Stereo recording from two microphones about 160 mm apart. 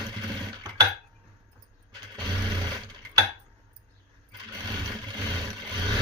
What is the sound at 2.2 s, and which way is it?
Sewing machine, 25° right (ahead or behind).